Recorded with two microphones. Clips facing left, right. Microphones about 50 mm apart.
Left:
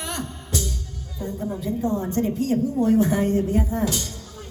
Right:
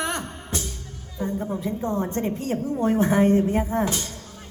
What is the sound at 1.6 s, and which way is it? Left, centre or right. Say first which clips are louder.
A woman's voice: left 4 dB; right.